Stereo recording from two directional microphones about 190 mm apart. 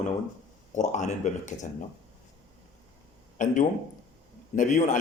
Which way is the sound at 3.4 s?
40° left (ahead or behind).